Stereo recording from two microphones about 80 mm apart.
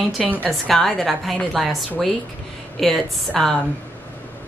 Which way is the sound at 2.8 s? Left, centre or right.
Centre.